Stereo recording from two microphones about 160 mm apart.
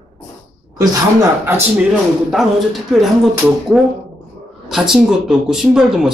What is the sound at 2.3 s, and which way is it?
Speech, centre (ahead or behind).